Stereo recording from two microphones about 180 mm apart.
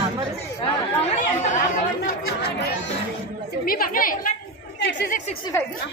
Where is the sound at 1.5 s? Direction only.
50° left (ahead or behind).